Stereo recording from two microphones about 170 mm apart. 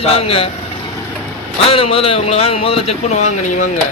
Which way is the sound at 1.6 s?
35° left (ahead or behind).